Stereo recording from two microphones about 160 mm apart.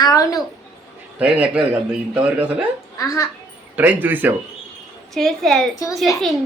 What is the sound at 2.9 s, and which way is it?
Speech, 20° left (ahead or behind).